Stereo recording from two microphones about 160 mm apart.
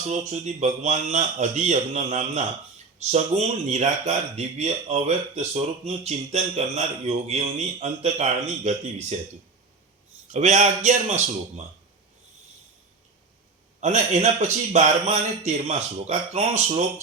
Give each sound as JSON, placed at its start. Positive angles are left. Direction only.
{"t": 0.1, "sound": "speech", "side_deg": -45}
{"t": 10.3, "sound": "speech", "side_deg": -45}
{"t": 13.8, "sound": "speech", "side_deg": -50}